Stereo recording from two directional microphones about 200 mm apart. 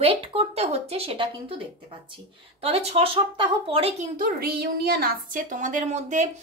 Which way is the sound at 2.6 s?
30° right (ahead or behind).